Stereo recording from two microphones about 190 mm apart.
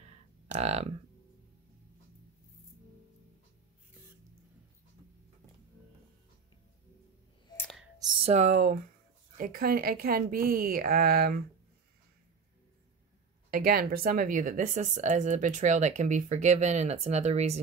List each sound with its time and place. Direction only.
0.5 s speech: 35° right (ahead or behind)
7.5 s a sound: 5° left (ahead or behind)
8.1 s a woman's voice: 30° right (ahead or behind); by 11.4 s 55° right (ahead or behind)
13.5 s speech: 50° right (ahead or behind); by 17.6 s 35° right (ahead or behind)